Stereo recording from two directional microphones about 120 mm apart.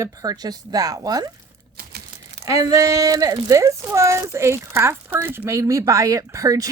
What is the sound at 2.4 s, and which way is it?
Speech, 30° right (ahead or behind).